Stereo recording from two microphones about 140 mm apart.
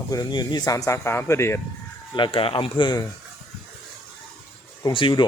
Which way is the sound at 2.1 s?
35° left (ahead or behind).